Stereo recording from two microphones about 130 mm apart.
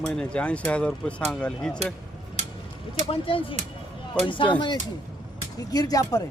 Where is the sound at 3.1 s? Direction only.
45° left (ahead or behind).